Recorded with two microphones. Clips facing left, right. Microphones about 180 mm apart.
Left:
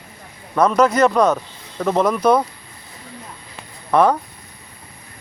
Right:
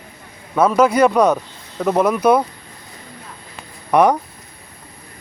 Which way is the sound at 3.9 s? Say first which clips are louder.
Right 1 dB; 15° right (ahead or behind).